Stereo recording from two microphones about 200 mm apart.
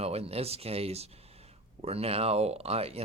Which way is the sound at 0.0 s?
30° right (ahead or behind).